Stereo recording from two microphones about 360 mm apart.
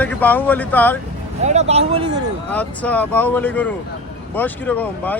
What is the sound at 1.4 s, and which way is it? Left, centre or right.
Speech, centre.